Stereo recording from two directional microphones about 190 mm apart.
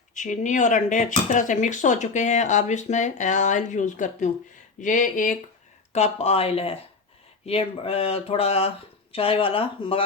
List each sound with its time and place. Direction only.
0.1 s speech: 40° left (ahead or behind)